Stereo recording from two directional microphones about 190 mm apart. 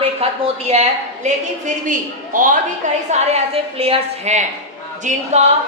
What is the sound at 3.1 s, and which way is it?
A woman's voice, 35° right (ahead or behind).